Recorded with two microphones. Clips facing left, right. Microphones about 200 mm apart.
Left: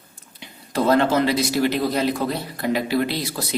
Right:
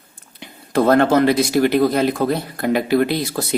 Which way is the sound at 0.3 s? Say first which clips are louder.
Right 6 dB; 55° right (ahead or behind).